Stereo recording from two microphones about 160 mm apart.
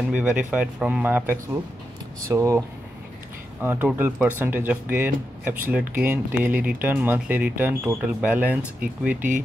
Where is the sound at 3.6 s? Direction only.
10° right (ahead or behind).